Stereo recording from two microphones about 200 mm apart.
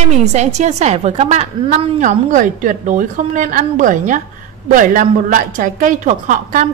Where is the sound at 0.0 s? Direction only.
35° right (ahead or behind).